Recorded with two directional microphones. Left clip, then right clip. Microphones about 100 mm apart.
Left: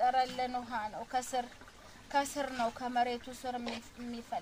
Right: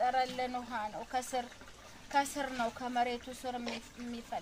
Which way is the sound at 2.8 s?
20° left (ahead or behind).